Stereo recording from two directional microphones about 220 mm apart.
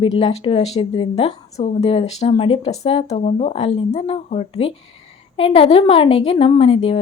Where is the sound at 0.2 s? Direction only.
25° left (ahead or behind).